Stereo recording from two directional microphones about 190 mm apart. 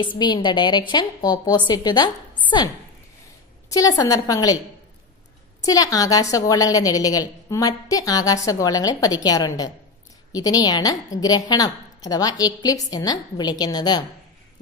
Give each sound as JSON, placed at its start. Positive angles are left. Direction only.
{"t": 0.2, "sound": "a woman's voice", "side_deg": 25}
{"t": 3.7, "sound": "a woman's voice", "side_deg": 20}
{"t": 5.6, "sound": "a woman's voice", "side_deg": 20}